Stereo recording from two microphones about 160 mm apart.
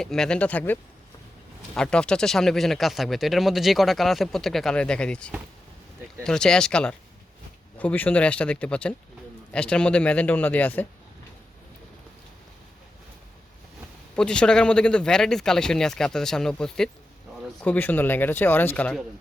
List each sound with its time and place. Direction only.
0.0 s speech: 5° left (ahead or behind)
14.2 s speech: 5° left (ahead or behind)